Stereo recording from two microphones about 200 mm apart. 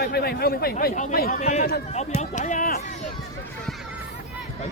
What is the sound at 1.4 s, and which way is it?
Speech, 35° left (ahead or behind).